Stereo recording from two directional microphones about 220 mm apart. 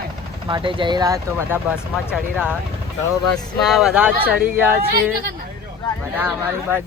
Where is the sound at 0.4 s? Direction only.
20° right (ahead or behind); by 4.1 s 5° right (ahead or behind).